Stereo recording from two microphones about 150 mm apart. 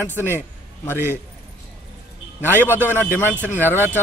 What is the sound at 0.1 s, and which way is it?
Speech, 15° right (ahead or behind).